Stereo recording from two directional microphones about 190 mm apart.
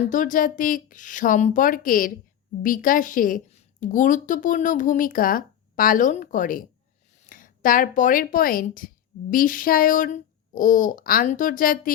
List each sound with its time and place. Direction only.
0.1 s a woman's voice: 40° left (ahead or behind)